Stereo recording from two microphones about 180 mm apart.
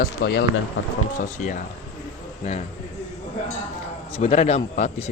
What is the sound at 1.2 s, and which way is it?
Speech, 45° left (ahead or behind).